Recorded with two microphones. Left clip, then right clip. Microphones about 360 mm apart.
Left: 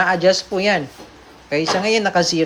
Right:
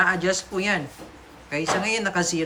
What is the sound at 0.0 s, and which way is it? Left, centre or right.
Speech, centre.